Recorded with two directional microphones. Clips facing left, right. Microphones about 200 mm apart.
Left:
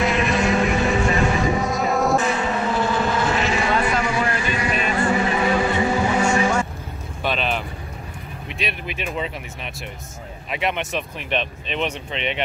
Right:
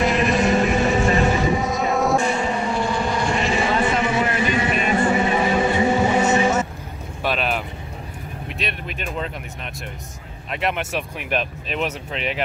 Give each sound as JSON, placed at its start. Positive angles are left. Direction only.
{"t": 0.0, "sound": "vehicle", "side_deg": 0}
{"t": 3.8, "sound": "vehicle", "side_deg": -25}
{"t": 4.9, "sound": "a sound", "side_deg": -25}
{"t": 5.5, "sound": "vehicle", "side_deg": -25}
{"t": 7.2, "sound": "vehicle", "side_deg": -5}
{"t": 10.5, "sound": "speech", "side_deg": 0}